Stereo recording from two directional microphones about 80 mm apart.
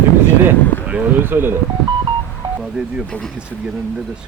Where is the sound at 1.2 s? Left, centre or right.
Right.